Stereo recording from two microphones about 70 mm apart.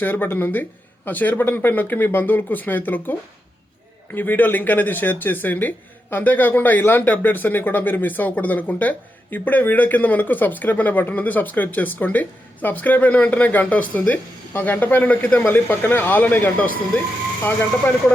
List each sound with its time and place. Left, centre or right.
0.0 s speech: left